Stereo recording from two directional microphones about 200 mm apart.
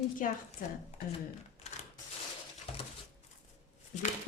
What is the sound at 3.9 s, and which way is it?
Speech, 35° left (ahead or behind).